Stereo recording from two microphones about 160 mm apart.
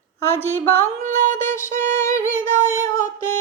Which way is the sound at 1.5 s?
15° left (ahead or behind).